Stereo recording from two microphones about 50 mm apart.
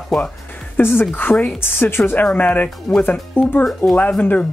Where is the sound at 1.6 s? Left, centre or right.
Left.